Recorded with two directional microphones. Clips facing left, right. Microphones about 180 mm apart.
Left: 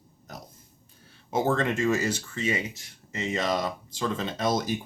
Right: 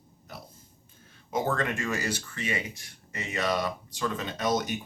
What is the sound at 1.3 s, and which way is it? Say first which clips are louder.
Speech: left 3 dB; 25° left (ahead or behind).